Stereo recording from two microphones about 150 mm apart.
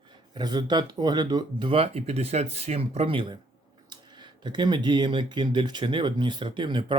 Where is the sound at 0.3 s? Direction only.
30° right (ahead or behind).